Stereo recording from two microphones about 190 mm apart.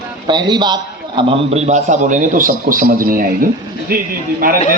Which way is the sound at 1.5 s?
40° right (ahead or behind).